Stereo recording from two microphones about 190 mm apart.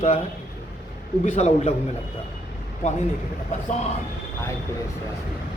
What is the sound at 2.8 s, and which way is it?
Speech, 40° left (ahead or behind).